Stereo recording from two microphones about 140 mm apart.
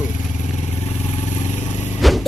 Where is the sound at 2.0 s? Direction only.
Centre (ahead or behind).